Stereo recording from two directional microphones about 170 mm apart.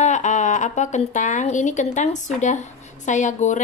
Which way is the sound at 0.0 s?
45° left (ahead or behind).